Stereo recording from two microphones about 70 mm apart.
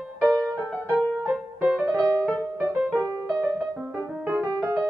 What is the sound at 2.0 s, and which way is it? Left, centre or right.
Music, right.